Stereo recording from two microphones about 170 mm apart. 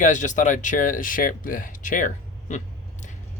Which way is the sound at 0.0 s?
45° left (ahead or behind).